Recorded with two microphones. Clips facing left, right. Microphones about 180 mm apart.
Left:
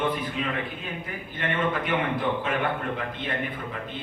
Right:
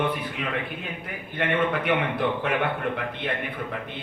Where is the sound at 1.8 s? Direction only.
65° right (ahead or behind).